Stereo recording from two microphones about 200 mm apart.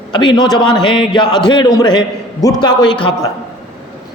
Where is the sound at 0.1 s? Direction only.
20° left (ahead or behind).